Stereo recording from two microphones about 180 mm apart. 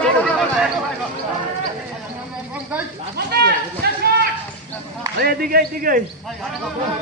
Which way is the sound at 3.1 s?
60° right (ahead or behind).